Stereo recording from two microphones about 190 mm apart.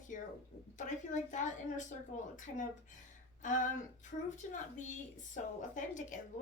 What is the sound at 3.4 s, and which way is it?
A woman's voice, 40° left (ahead or behind).